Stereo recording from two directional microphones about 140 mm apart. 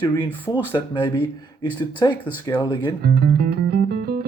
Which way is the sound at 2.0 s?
35° left (ahead or behind).